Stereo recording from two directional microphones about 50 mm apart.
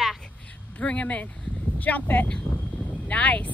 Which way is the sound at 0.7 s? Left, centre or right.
Left.